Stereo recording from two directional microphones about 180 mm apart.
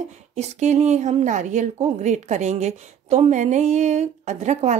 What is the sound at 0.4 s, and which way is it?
A woman's voice, 40° right (ahead or behind).